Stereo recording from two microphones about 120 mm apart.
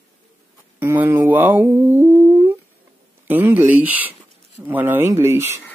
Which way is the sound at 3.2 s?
15° right (ahead or behind).